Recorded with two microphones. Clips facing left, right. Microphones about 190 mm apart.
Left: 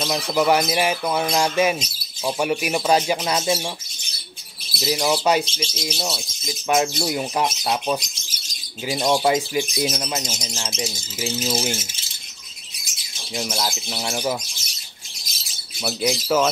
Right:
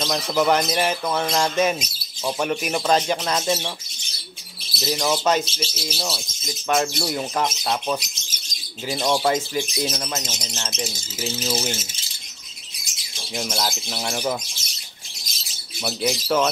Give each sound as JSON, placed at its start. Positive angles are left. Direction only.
{"t": 0.0, "sound": "speech", "side_deg": 5}
{"t": 4.7, "sound": "speech", "side_deg": 10}
{"t": 5.4, "sound": "speech", "side_deg": -5}
{"t": 13.4, "sound": "speech", "side_deg": 0}
{"t": 15.8, "sound": "speech", "side_deg": 5}